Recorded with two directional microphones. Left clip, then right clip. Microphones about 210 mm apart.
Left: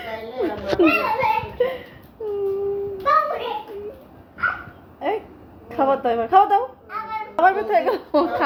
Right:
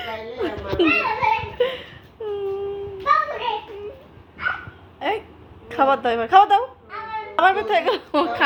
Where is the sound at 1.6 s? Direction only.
15° right (ahead or behind).